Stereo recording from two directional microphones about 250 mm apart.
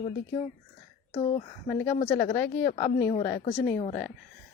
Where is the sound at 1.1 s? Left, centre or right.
Left.